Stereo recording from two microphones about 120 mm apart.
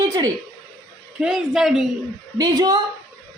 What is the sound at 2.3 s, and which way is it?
Speech, 30° right (ahead or behind).